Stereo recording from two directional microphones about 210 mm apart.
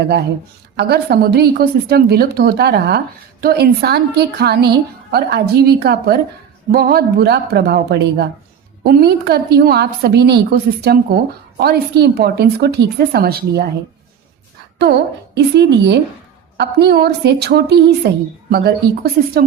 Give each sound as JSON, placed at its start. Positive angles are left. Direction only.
{"t": 0.8, "sound": "a woman's voice", "side_deg": -50}
{"t": 15.5, "sound": "a woman's voice", "side_deg": -55}